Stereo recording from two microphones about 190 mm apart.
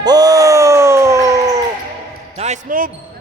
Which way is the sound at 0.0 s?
20° right (ahead or behind).